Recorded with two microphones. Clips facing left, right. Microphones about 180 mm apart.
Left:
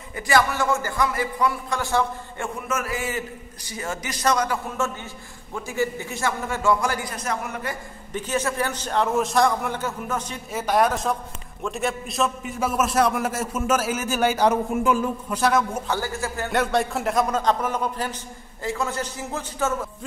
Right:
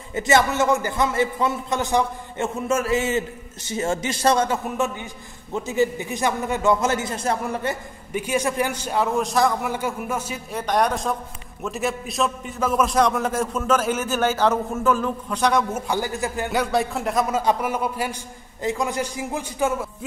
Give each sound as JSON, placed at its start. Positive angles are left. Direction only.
{"t": 0.1, "sound": "a man's voice", "side_deg": -25}
{"t": 8.1, "sound": "a man's voice", "side_deg": -10}
{"t": 10.5, "sound": "a man's voice", "side_deg": 5}
{"t": 15.7, "sound": "a man's voice", "side_deg": -15}
{"t": 16.5, "sound": "a man's voice", "side_deg": 0}